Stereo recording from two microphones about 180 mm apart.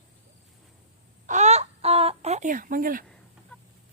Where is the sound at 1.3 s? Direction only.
40° right (ahead or behind).